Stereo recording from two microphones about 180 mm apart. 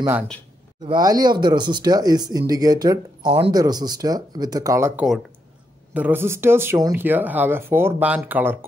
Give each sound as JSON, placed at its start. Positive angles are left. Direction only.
{"t": 0.8, "sound": "speech", "side_deg": -20}